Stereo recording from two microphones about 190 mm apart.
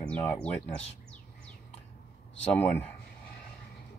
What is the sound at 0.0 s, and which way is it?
Speech, 10° left (ahead or behind).